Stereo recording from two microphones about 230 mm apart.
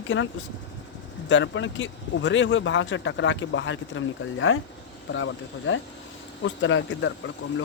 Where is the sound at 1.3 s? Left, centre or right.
Left.